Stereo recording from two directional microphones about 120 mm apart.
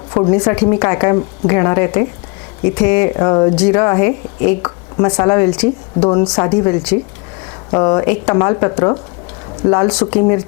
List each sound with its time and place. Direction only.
0.1 s speech: 25° left (ahead or behind)